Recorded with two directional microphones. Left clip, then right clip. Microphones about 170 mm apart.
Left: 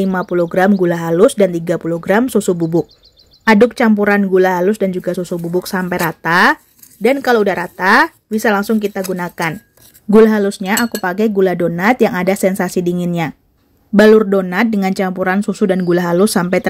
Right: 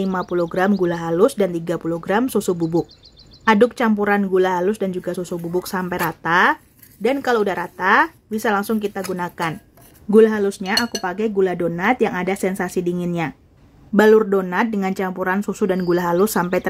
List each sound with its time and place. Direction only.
0.5 s speech: 25° left (ahead or behind)
2.6 s speech: centre (ahead or behind)
3.4 s speech: 20° left (ahead or behind)